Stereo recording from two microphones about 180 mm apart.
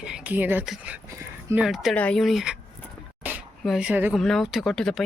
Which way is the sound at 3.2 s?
10° right (ahead or behind).